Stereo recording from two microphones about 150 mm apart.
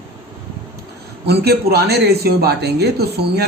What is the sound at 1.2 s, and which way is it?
Speech, 90° right.